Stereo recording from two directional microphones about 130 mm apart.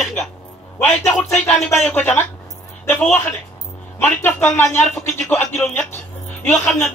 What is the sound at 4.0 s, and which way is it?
A man's voice, 15° left (ahead or behind).